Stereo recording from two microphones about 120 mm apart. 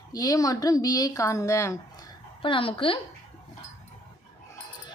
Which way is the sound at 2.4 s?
45° left (ahead or behind).